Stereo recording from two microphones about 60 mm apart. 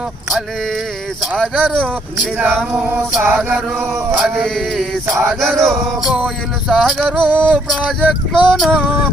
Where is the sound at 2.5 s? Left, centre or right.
Right.